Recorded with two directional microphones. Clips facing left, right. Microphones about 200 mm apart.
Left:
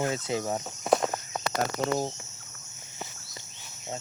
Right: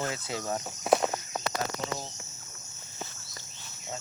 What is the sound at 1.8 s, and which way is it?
Cricket, 45° left (ahead or behind).